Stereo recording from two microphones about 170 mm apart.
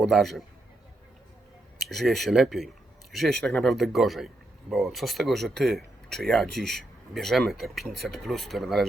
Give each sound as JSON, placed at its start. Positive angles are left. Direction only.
{"t": 0.0, "sound": "speech", "side_deg": 0}
{"t": 1.8, "sound": "speech", "side_deg": 0}